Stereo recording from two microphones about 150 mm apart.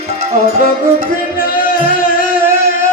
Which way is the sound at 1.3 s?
70° left (ahead or behind).